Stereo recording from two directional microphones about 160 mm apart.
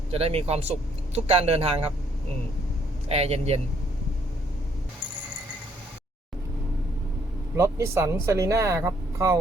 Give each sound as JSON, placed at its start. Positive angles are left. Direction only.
{"t": 0.1, "sound": "speech", "side_deg": -40}
{"t": 3.1, "sound": "speech", "side_deg": -40}
{"t": 7.5, "sound": "speech", "side_deg": -20}